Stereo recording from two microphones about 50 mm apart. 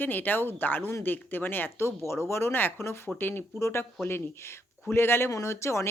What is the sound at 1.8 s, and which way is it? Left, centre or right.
Speech, left.